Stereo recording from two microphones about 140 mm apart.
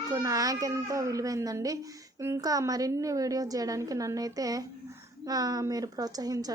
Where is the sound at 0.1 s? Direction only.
25° right (ahead or behind).